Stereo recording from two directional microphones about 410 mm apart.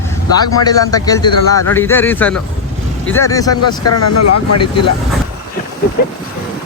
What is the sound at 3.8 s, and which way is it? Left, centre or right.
Speech, left.